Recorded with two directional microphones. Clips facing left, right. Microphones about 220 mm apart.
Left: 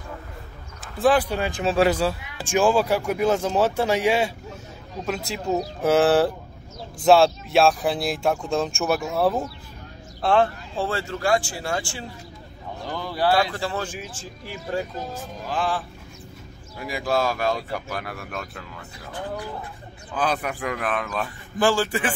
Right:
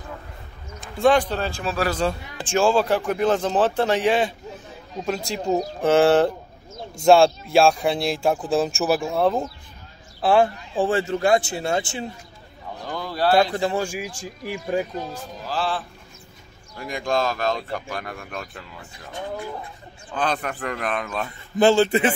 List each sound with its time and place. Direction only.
0.7 s basketball bounce: 5° left (ahead or behind)
1.3 s a man's voice: 15° left (ahead or behind)
1.6 s a man's voice: 25° left (ahead or behind)
2.0 s a man's voice: 5° left (ahead or behind)
10.2 s speech: 10° right (ahead or behind)
13.3 s speech: 20° right (ahead or behind)
15.5 s a man's voice: 15° left (ahead or behind)
16.7 s speech: 5° left (ahead or behind)
20.2 s a man's voice: 5° left (ahead or behind)
21.5 s speech: 25° right (ahead or behind)